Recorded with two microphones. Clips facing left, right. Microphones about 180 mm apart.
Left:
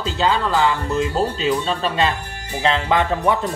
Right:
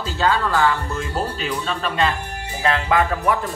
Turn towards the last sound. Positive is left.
turn(degrees=25)  # may be behind; listen again after turning